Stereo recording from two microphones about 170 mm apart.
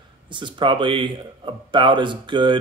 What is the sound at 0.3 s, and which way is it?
A man's voice, 30° right (ahead or behind).